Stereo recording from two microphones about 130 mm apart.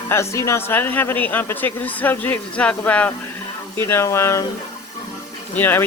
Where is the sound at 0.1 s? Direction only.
20° left (ahead or behind).